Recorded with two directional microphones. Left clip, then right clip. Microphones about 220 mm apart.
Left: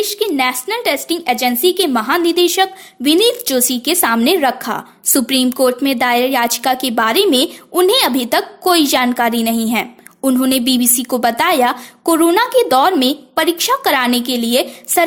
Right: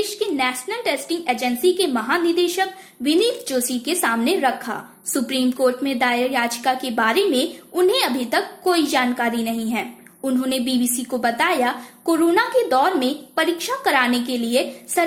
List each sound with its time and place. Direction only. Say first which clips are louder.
0.2 s a woman's voice: left 6 dB; 45° left (ahead or behind)